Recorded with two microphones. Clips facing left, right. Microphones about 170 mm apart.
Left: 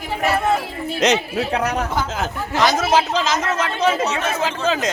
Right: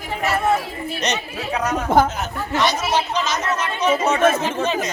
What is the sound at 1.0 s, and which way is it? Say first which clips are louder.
Speech: left 9 dB; 75° left (ahead or behind).